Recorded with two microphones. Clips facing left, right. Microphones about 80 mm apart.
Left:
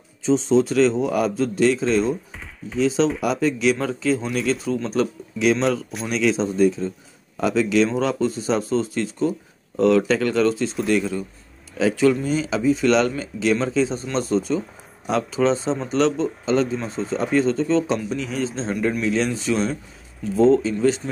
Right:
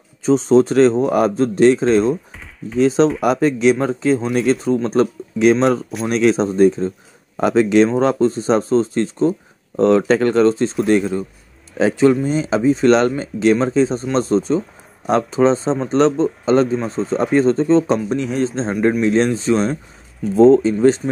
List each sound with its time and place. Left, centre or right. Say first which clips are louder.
0.2 s speech: right 5 dB; right
4.3 s speech: right 6 dB; right
15.0 s speech: right 6 dB; right
15.4 s speech: right 4 dB; right
16.2 s speech: right 6 dB; right
16.9 s speech: right 5 dB; centre
17.2 s speech: right 5 dB; right
19.0 s speech: right 6 dB; right